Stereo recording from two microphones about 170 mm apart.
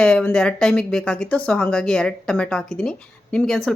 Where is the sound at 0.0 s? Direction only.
5° left (ahead or behind).